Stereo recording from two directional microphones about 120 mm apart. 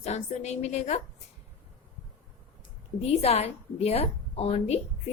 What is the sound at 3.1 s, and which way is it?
A woman's voice, 60° left (ahead or behind).